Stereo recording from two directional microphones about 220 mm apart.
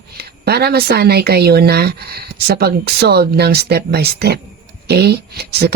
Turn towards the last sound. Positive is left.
turn(degrees=-45)  # may be behind; listen again after turning